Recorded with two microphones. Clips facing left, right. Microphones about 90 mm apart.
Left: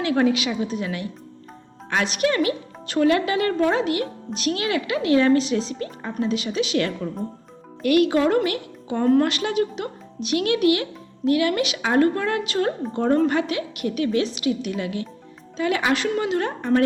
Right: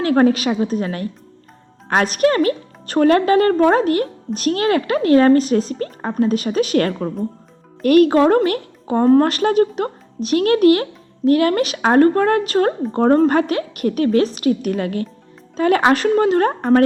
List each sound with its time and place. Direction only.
0.0 s a woman's voice: 45° right (ahead or behind)